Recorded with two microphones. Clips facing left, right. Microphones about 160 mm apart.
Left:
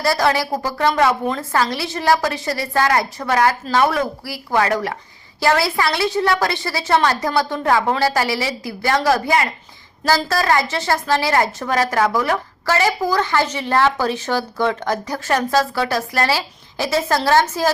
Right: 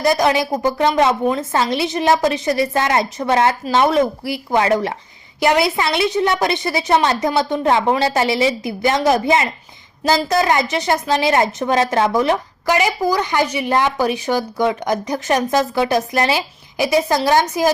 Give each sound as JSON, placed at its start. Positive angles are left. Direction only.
{"t": 0.0, "sound": "a woman's voice", "side_deg": -20}